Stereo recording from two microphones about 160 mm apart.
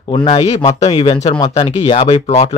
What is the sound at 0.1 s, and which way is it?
Speech, 35° left (ahead or behind).